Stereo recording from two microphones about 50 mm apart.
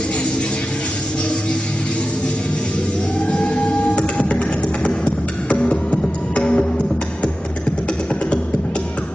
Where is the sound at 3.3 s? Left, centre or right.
Left.